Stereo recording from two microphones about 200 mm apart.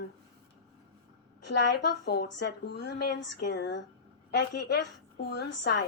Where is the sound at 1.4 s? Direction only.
60° left (ahead or behind).